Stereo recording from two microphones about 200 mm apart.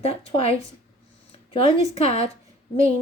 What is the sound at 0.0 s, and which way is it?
A woman's voice, 30° left (ahead or behind).